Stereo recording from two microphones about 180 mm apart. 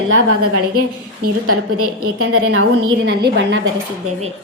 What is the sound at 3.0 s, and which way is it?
Speech, 65° right (ahead or behind).